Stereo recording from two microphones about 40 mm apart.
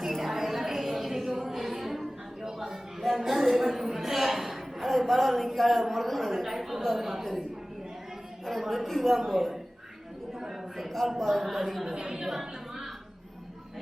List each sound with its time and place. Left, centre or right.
0.0 s a sound: centre
5.5 s a man's voice: centre
8.4 s a man's voice: centre
10.8 s a man's voice: centre
11.9 s a woman's voice: centre
12.3 s a sound: centre